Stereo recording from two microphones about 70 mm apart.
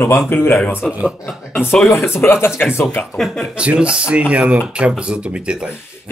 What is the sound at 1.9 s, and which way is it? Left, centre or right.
Speech, left.